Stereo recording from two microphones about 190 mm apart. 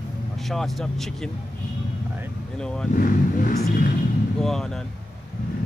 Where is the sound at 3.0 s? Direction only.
45° left (ahead or behind).